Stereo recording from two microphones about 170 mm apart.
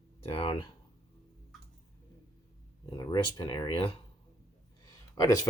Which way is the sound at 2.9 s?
25° left (ahead or behind).